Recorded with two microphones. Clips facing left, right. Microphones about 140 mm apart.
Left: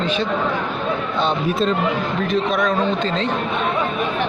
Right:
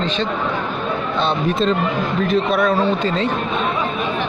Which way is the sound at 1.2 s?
5° left (ahead or behind).